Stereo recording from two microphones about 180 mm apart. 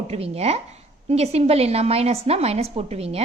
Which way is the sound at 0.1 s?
35° right (ahead or behind).